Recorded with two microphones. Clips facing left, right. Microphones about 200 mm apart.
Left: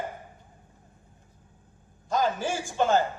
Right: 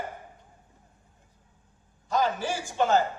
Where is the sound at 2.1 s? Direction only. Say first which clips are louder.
Even; 45° left (ahead or behind).